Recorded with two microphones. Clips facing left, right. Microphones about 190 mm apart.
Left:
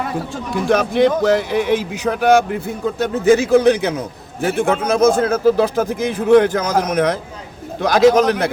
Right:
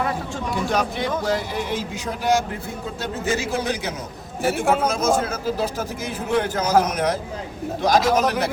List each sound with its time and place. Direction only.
0.7 s speech: 65° left (ahead or behind)